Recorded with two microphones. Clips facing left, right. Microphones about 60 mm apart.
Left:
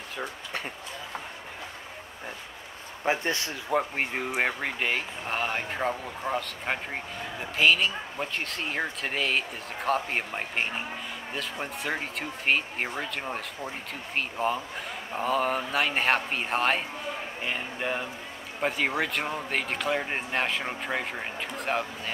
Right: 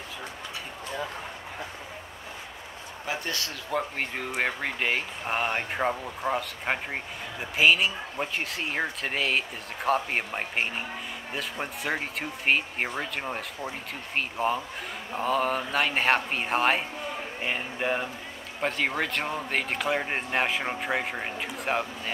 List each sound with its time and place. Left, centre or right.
3.1 s speech: left
4.3 s speech: centre
18.6 s speech: centre